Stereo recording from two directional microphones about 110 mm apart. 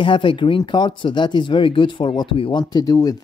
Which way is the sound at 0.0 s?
50° left (ahead or behind).